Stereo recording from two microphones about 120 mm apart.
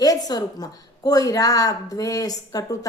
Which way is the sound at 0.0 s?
30° left (ahead or behind).